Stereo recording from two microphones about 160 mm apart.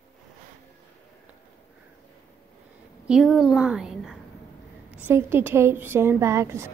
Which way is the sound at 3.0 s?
5° right (ahead or behind).